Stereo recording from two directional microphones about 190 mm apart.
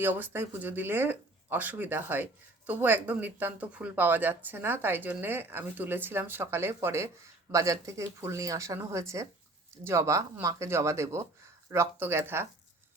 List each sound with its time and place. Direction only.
0.0 s speech: 10° right (ahead or behind)